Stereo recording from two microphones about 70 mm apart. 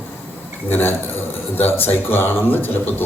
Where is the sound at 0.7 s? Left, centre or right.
Left.